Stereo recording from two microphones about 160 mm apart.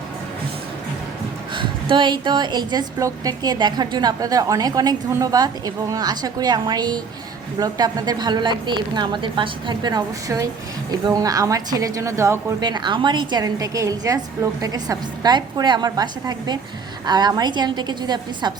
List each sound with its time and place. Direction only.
1.5 s a woman's voice: 30° right (ahead or behind)